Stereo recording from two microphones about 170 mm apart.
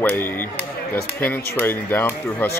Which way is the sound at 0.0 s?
10° left (ahead or behind).